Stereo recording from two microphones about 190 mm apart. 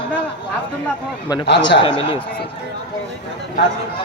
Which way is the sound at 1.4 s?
65° left (ahead or behind).